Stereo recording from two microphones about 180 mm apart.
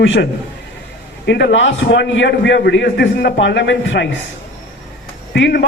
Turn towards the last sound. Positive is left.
turn(degrees=70)  # may be behind; listen again after turning